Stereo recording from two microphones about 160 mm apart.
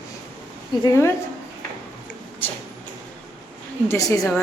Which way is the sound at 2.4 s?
10° left (ahead or behind).